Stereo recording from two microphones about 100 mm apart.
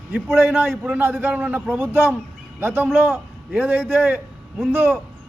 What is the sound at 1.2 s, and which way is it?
A man's voice, 20° right (ahead or behind).